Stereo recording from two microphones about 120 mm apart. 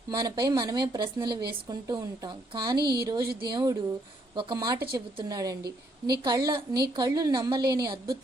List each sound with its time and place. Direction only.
0.1 s a woman's voice: 35° right (ahead or behind)